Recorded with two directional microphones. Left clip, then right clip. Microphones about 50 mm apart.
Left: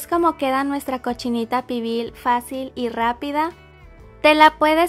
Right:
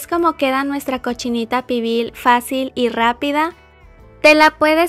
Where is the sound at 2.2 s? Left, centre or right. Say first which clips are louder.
Right 7 dB; right.